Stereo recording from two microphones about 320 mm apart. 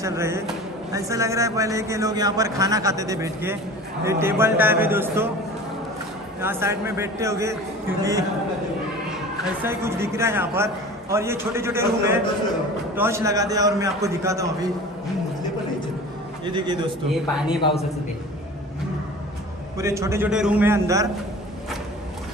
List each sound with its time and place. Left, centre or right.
0.0 s a man's voice: centre
6.4 s a man's voice: centre
9.6 s a man's voice: centre
17.1 s a man's voice: centre
17.6 s a man's voice: centre
19.8 s a man's voice: centre